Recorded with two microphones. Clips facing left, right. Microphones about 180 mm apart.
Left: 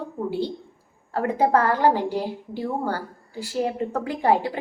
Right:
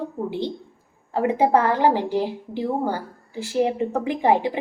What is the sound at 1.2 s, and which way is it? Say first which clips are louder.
A woman's voice: right 2 dB; 15° right (ahead or behind).